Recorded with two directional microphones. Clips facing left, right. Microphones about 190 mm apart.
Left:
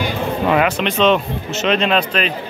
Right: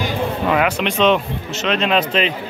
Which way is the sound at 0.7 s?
10° right (ahead or behind).